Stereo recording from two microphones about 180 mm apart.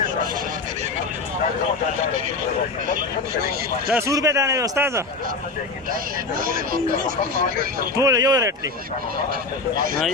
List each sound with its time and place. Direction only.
3.9 s a man's voice: 15° right (ahead or behind)
6.4 s speech: 50° right (ahead or behind)
7.9 s speech: 20° right (ahead or behind)
9.7 s speech: 50° right (ahead or behind)